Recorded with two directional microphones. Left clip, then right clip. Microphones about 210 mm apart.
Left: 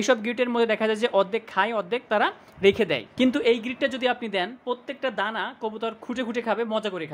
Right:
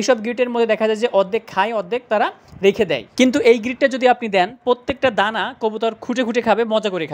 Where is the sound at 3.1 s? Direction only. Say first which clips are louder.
Right 10 dB; 25° right (ahead or behind).